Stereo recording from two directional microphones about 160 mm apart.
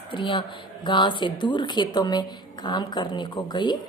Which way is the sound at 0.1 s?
30° left (ahead or behind).